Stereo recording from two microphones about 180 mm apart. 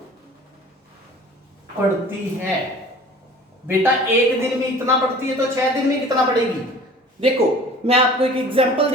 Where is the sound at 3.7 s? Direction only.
10° right (ahead or behind).